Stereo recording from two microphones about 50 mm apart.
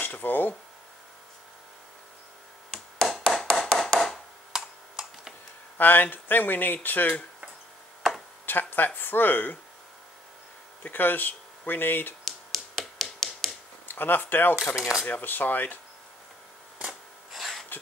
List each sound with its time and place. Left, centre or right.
0.0 s speech: left
2.7 s a sound: centre
4.5 s computer keyboard: centre
5.8 s speech: left
8.5 s speech: left
10.8 s speech: left
12.3 s a sound: centre
13.8 s speech: left
14.8 s speech: centre
15.0 s speech: left
17.3 s a sound: centre